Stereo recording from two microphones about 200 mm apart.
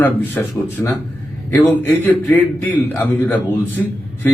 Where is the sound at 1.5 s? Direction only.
10° left (ahead or behind).